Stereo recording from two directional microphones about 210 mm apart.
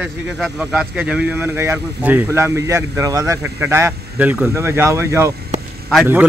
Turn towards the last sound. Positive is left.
turn(degrees=-10)  # may be behind; listen again after turning